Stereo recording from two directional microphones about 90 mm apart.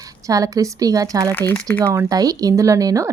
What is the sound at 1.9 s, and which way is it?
Speech, 40° right (ahead or behind).